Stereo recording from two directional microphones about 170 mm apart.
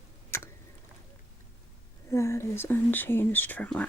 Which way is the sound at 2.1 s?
15° left (ahead or behind).